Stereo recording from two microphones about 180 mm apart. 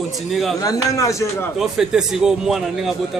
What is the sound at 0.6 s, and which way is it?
Speech, 20° left (ahead or behind).